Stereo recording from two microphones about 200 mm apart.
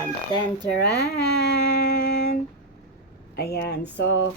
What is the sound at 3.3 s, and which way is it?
Speech, 50° left (ahead or behind).